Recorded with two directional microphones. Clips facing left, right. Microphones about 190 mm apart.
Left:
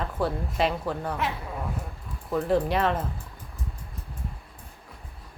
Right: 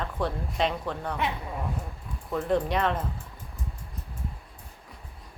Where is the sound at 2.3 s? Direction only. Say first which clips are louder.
Left 2 dB; centre (ahead or behind).